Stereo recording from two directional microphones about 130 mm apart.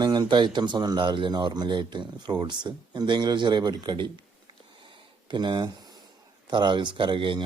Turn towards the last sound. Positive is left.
turn(degrees=-40)  # may be behind; listen again after turning